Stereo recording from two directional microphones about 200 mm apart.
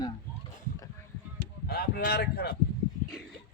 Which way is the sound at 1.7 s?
50° left (ahead or behind).